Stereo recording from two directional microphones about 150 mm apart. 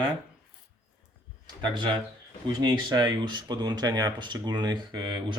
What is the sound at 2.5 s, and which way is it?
Speech, 25° right (ahead or behind).